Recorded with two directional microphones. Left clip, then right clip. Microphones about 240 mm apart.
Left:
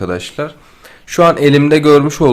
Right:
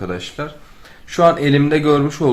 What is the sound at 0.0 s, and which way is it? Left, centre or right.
Speech, left.